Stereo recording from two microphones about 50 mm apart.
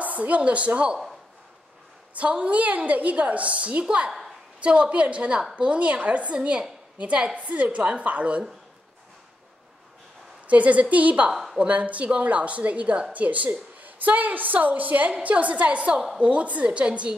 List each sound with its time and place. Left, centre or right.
0.0 s a woman's voice: right
2.1 s a woman's voice: right
10.4 s a woman's voice: right